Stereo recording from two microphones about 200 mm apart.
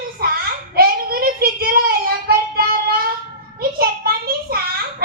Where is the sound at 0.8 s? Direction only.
50° right (ahead or behind).